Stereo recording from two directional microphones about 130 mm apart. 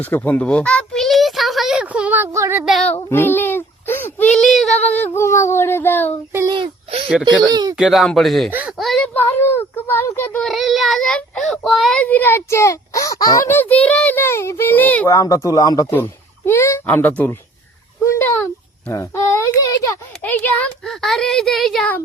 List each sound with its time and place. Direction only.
0.0 s a sound: 15° left (ahead or behind); by 2.6 s 20° right (ahead or behind)
3.1 s a sound: 15° left (ahead or behind)
4.4 s female singing: centre (ahead or behind)
4.8 s a child's voice: 10° left (ahead or behind)
6.5 s a sound: 45° right (ahead or behind)
7.4 s speech: 30° right (ahead or behind)
7.8 s speech: centre (ahead or behind)
8.5 s a sound: 5° right (ahead or behind)
9.1 s child singing: 15° left (ahead or behind)
10.5 s speech: centre (ahead or behind)
12.0 s a child's voice: 15° left (ahead or behind)
14.2 s a child's voice: 20° left (ahead or behind)
15.0 s a child's voice: 25° left (ahead or behind)
20.2 s speech: 10° left (ahead or behind)